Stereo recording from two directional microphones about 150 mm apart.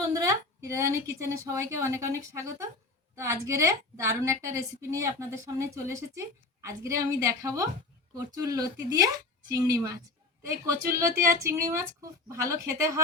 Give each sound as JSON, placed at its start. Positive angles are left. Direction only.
{"t": 0.3, "sound": "a woman's voice", "side_deg": -20}